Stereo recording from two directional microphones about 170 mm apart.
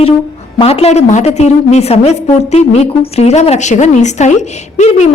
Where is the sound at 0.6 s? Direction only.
35° left (ahead or behind).